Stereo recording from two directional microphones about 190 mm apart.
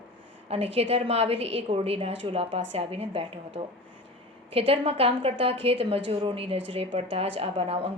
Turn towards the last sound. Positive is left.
turn(degrees=-30)  # may be behind; listen again after turning